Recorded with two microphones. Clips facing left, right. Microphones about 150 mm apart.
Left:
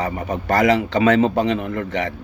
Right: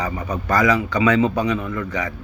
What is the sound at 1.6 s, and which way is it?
Speech, 65° left (ahead or behind).